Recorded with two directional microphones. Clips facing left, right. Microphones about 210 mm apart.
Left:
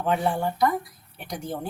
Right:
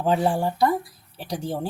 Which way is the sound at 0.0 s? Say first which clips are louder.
Right 3 dB; 30° right (ahead or behind).